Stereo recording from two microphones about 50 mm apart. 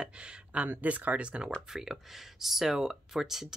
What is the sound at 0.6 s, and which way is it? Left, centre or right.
Speech, right.